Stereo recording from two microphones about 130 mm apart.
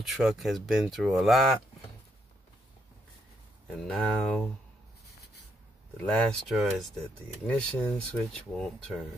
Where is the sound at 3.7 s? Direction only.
10° left (ahead or behind).